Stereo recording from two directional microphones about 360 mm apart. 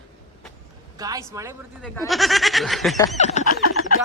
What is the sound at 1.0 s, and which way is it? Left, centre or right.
A man's voice, centre.